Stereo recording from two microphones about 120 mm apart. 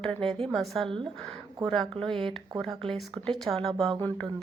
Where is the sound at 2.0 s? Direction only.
45° right (ahead or behind).